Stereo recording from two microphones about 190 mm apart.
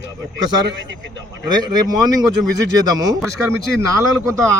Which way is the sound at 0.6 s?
70° right (ahead or behind).